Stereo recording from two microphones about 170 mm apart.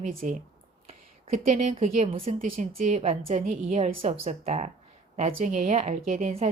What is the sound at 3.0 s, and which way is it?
A woman's voice, 35° right (ahead or behind).